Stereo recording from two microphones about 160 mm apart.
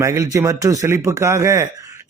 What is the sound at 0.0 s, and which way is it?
A man's voice, 20° right (ahead or behind).